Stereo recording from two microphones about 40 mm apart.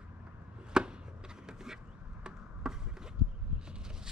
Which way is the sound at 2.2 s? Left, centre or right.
Centre.